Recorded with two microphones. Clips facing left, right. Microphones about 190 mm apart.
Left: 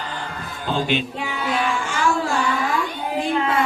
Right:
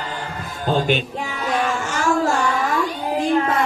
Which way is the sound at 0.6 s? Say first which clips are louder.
Right 3 dB; 45° right (ahead or behind).